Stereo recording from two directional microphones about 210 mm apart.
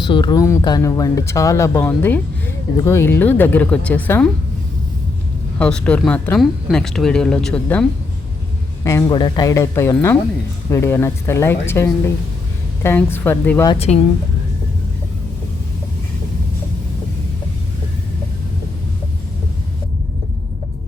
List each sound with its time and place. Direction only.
0.0 s speech: 20° left (ahead or behind)
5.5 s speech: 5° left (ahead or behind)
13.7 s speech: 30° left (ahead or behind)